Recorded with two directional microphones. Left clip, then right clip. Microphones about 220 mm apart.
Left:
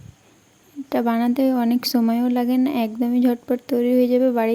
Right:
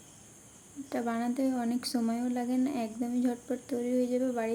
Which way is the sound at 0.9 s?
40° left (ahead or behind).